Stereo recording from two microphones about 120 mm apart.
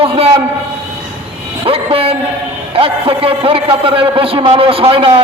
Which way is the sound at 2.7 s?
50° right (ahead or behind).